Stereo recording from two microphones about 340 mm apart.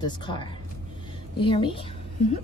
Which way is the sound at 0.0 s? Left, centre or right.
Centre.